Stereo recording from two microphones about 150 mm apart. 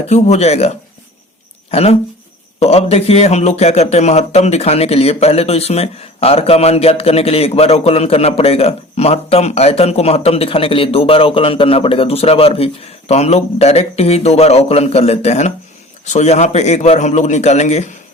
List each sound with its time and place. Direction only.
0.1 s speech: 45° left (ahead or behind)
1.7 s speech: 45° left (ahead or behind)